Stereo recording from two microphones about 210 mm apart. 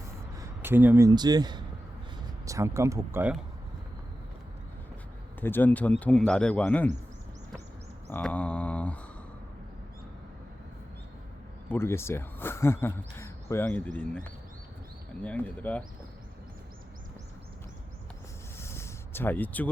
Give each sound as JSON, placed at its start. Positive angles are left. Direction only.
{"t": 0.3, "sound": "speech", "side_deg": -10}
{"t": 5.4, "sound": "speech", "side_deg": 10}
{"t": 8.1, "sound": "mantra", "side_deg": 5}
{"t": 11.7, "sound": "speech", "side_deg": 10}
{"t": 15.2, "sound": "speech", "side_deg": 5}
{"t": 18.6, "sound": "a sound", "side_deg": 10}